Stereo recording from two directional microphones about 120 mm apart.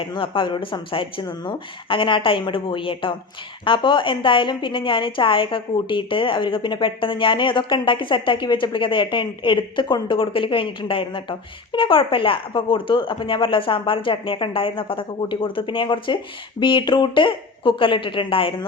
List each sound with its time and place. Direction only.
0.0 s a woman's voice: 45° left (ahead or behind)